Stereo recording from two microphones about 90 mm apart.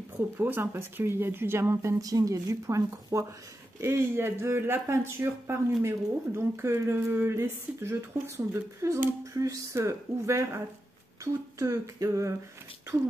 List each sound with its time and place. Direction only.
0.4 s speech: 25° right (ahead or behind)